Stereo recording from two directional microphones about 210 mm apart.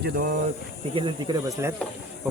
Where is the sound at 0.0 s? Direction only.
45° right (ahead or behind).